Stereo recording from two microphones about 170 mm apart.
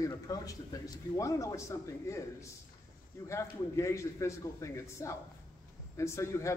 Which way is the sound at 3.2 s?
15° left (ahead or behind).